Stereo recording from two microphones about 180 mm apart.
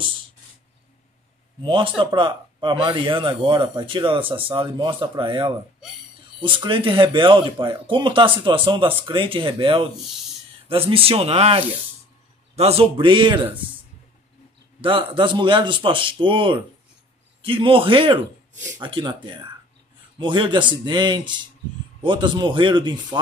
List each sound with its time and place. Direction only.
1.6 s speech: 30° right (ahead or behind)
14.8 s speech: 30° right (ahead or behind)
20.2 s speech: 25° right (ahead or behind)